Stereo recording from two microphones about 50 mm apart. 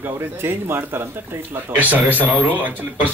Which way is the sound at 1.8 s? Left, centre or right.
Right.